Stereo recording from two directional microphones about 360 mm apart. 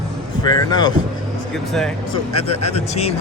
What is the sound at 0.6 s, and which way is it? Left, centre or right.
Speech, centre.